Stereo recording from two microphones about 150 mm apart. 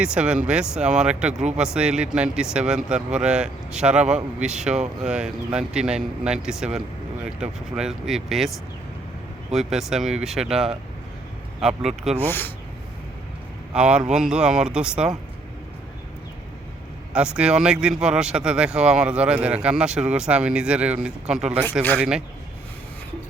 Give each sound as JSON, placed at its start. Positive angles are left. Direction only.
{"t": 0.0, "sound": "speech", "side_deg": -5}
{"t": 1.3, "sound": "speech", "side_deg": -50}
{"t": 1.5, "sound": "speech", "side_deg": -5}
{"t": 12.2, "sound": "speech", "side_deg": 15}
{"t": 13.7, "sound": "speech", "side_deg": -5}
{"t": 17.2, "sound": "speech", "side_deg": -5}